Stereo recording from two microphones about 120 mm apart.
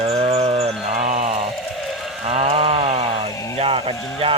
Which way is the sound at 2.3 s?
55° right (ahead or behind).